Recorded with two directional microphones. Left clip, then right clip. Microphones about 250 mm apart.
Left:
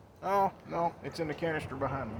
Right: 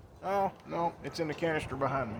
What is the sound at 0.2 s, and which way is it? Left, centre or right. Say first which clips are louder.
Speech: left 2 dB; centre.